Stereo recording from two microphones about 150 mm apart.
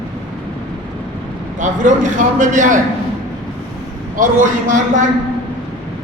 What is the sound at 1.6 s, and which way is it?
A man's voice, 55° right (ahead or behind).